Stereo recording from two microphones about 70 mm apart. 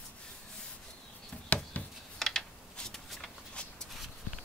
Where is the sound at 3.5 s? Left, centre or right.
Centre.